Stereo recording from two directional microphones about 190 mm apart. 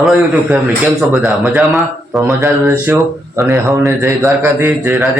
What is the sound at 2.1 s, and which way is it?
Speech, 15° right (ahead or behind).